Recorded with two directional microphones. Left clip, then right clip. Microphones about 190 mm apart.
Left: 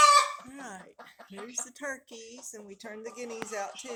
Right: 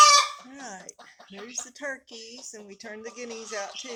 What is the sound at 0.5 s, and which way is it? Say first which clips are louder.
Dog: right 3 dB; 20° right (ahead or behind).